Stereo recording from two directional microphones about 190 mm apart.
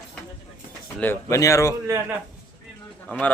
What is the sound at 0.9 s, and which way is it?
Speech, 15° left (ahead or behind).